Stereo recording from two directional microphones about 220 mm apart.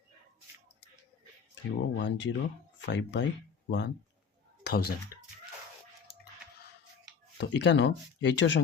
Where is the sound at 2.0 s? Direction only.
55° left (ahead or behind).